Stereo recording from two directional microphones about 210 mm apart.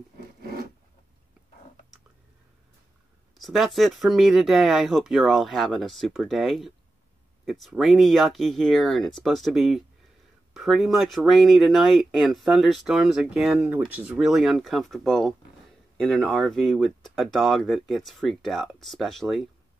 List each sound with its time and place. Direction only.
0.4 s filing: 45° right (ahead or behind)
3.3 s speech: centre (ahead or behind)